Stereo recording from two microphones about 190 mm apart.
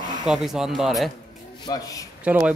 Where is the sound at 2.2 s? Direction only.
5° right (ahead or behind).